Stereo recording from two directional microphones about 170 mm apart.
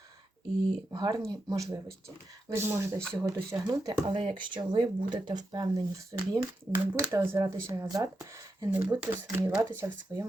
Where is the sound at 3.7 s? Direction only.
25° right (ahead or behind); by 9.6 s 5° right (ahead or behind).